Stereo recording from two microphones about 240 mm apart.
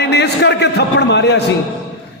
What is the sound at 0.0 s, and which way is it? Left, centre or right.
A man's voice, left.